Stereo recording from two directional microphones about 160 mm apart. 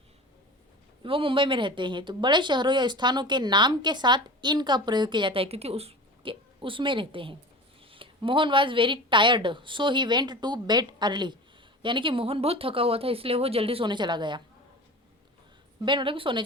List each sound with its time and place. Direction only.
1.0 s a woman's voice: 35° right (ahead or behind)
15.8 s a woman's voice: 30° right (ahead or behind)